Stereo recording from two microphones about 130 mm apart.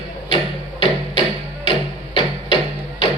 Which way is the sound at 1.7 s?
45° left (ahead or behind).